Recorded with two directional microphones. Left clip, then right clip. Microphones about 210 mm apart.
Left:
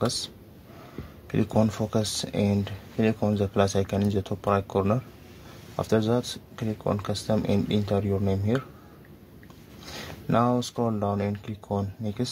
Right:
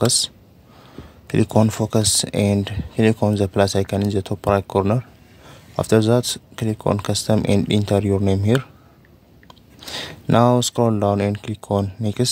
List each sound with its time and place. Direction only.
0.0 s speech: 40° right (ahead or behind)
9.8 s speech: 40° right (ahead or behind)